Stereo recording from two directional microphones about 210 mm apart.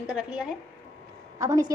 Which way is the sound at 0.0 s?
5° right (ahead or behind).